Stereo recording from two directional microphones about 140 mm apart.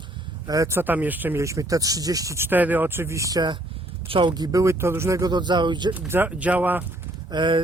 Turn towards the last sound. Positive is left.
turn(degrees=-35)  # may be behind; listen again after turning